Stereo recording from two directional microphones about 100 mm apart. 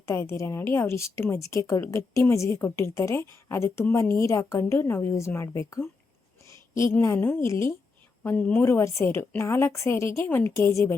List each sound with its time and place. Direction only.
0.1 s a woman's voice: 30° left (ahead or behind)
6.4 s a sound: 30° left (ahead or behind)
6.9 s a woman's voice: 20° left (ahead or behind)